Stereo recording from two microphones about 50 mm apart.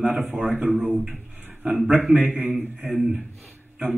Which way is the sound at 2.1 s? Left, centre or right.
Right.